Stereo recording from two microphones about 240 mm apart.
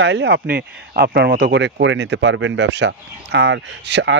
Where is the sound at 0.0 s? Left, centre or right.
Right.